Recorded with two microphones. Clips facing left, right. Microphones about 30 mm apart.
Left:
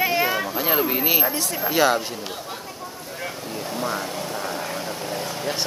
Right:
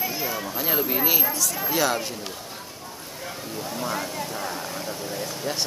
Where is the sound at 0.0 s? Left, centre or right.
Left.